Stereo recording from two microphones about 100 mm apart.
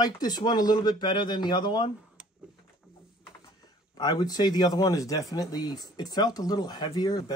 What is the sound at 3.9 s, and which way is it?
Speech, 45° left (ahead or behind).